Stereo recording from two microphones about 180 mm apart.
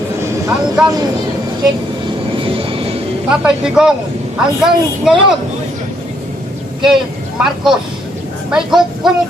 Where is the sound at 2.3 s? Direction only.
30° right (ahead or behind).